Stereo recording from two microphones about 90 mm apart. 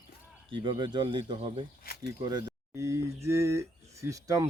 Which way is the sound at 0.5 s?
65° right (ahead or behind).